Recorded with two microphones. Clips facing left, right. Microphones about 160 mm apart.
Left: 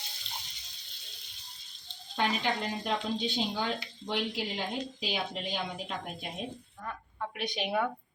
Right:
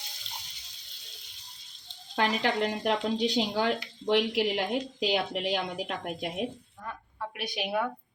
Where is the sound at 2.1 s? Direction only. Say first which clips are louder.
Right 3 dB; 80° right.